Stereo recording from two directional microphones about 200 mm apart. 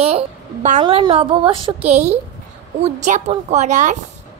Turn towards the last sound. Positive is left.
turn(degrees=-35)  # may be behind; listen again after turning